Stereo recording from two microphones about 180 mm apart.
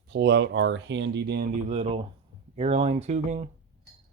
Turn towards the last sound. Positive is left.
turn(degrees=-40)  # may be behind; listen again after turning